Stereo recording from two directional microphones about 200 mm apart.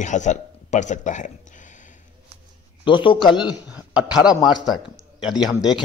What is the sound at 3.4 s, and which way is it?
A man's voice, 5° right (ahead or behind).